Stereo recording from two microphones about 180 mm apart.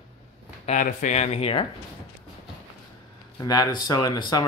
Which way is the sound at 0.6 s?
45° left (ahead or behind).